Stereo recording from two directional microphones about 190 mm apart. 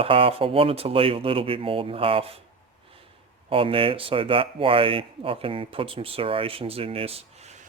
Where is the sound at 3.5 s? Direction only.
30° right (ahead or behind).